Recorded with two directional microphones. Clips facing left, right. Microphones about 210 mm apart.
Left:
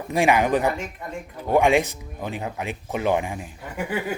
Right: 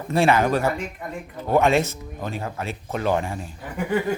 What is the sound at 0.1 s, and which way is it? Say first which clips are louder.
Speech: right 1 dB; 15° left (ahead or behind).